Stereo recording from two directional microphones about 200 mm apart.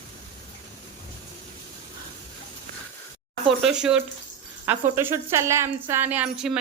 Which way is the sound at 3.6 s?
5° right (ahead or behind).